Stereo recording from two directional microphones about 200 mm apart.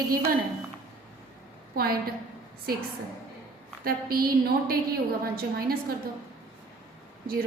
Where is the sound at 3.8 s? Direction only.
50° right (ahead or behind).